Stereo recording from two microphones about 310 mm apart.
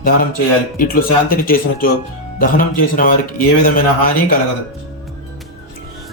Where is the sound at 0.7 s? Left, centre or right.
Left.